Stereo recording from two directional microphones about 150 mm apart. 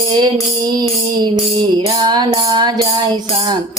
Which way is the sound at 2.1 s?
30° right (ahead or behind).